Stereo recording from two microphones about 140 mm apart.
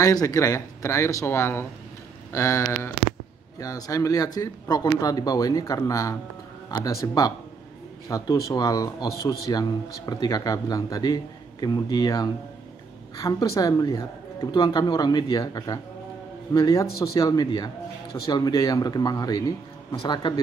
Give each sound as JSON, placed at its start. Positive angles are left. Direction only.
{"t": 0.0, "sound": "speech", "side_deg": 25}